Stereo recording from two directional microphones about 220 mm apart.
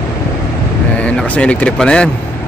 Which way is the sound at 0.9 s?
5° left (ahead or behind).